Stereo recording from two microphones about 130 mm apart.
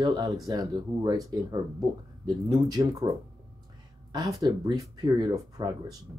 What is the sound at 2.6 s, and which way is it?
Speech, 30° right (ahead or behind).